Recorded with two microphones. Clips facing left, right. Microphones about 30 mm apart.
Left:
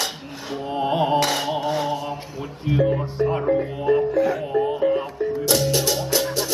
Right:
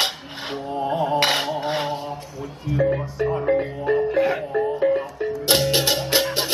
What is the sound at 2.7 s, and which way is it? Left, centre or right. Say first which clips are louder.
Speech: left 2 dB; left.